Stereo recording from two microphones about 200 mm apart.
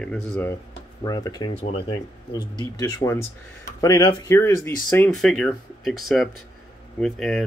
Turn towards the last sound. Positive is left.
turn(degrees=0)  # may be behind; listen again after turning